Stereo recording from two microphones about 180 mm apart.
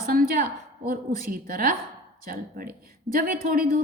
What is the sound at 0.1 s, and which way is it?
A woman's voice, 50° right (ahead or behind).